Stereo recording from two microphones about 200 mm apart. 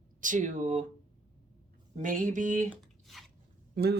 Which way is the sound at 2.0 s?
40° right (ahead or behind).